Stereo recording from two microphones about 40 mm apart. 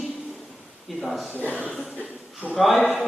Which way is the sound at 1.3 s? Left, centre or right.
Left.